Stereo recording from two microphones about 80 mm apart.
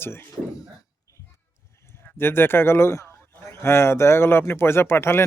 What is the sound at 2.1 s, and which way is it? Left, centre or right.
A man's voice, left.